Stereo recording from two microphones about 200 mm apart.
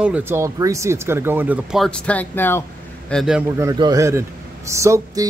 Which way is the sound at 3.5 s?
20° right (ahead or behind).